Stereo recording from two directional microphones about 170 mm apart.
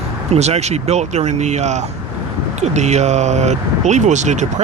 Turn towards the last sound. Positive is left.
turn(degrees=-45)  # may be behind; listen again after turning